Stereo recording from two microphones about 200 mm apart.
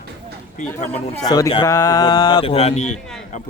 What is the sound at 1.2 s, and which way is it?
Speech, 20° left (ahead or behind).